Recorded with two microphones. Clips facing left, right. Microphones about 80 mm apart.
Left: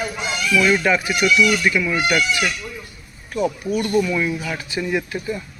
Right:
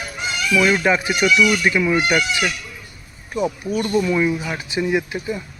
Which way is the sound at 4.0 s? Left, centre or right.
Right.